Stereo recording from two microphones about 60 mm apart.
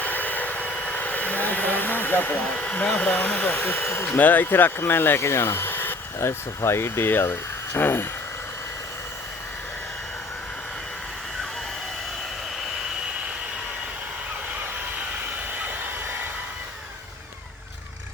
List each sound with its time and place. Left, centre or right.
0.0 s vehicle: left
0.7 s vehicle: centre
0.9 s a sound: left
3.8 s speech: left
4.2 s speech: left
6.1 s speech: left